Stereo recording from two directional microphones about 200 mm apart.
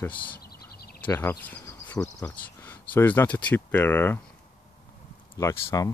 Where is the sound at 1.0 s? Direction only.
10° left (ahead or behind).